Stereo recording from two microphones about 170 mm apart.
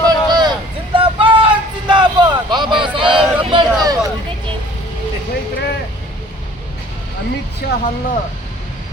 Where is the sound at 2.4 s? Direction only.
25° right (ahead or behind).